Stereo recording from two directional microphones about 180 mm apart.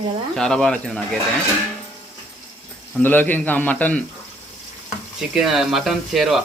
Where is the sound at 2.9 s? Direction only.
10° left (ahead or behind).